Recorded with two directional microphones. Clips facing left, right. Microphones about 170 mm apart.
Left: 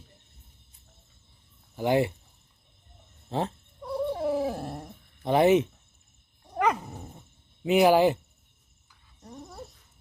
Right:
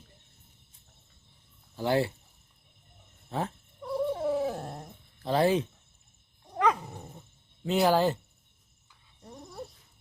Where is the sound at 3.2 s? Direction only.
30° left (ahead or behind).